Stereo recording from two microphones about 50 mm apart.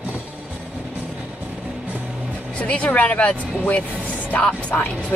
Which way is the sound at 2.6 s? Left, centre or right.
Left.